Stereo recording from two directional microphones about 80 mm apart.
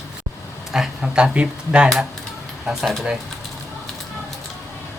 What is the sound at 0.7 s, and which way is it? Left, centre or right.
Speech, centre.